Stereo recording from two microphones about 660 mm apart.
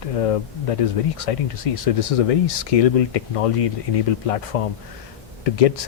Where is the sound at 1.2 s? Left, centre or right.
Left.